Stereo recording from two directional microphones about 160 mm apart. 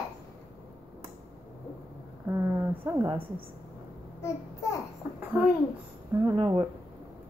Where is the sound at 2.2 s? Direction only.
15° right (ahead or behind).